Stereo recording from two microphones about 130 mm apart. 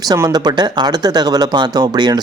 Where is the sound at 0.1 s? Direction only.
30° right (ahead or behind).